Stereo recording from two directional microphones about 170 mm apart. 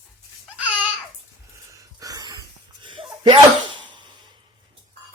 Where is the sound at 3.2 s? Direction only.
30° right (ahead or behind).